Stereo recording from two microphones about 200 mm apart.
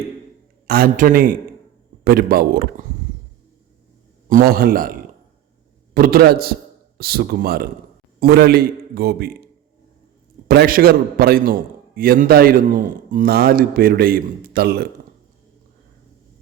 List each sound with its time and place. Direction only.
0.7 s a man's voice: 45° right (ahead or behind)
4.3 s a man's voice: 45° right (ahead or behind)
10.5 s a man's voice: 50° right (ahead or behind)